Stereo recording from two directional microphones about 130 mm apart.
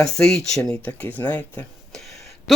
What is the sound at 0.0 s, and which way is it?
Speech, 5° left (ahead or behind).